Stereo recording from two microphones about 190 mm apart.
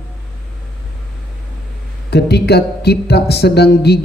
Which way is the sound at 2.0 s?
60° left (ahead or behind).